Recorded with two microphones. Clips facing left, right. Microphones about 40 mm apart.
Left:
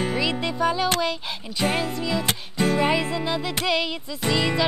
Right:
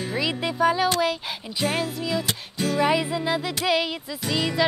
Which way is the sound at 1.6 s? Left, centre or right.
Left.